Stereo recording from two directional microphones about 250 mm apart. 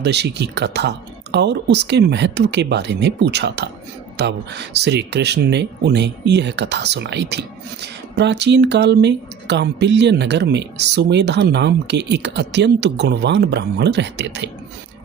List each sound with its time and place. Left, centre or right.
0.0 s speech: right